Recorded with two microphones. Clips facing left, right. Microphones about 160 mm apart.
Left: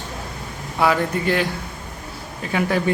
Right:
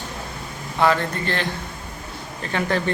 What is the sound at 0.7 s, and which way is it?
Speech, 10° left (ahead or behind).